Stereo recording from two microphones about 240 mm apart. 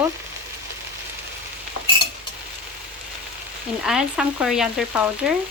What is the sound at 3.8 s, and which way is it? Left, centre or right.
Frying, centre.